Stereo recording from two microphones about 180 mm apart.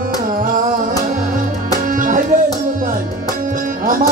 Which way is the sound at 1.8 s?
45° right (ahead or behind).